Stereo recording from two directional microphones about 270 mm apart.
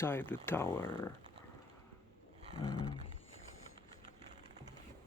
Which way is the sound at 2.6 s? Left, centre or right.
Centre.